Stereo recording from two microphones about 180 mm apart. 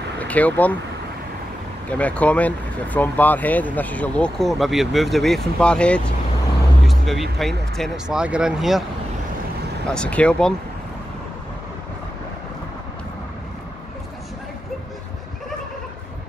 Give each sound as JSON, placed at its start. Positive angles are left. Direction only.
{"t": 0.2, "sound": "speech", "side_deg": 10}
{"t": 1.9, "sound": "speech", "side_deg": 10}
{"t": 9.8, "sound": "speech", "side_deg": 5}